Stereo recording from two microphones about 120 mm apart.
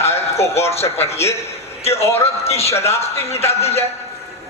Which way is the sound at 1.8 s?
60° left (ahead or behind).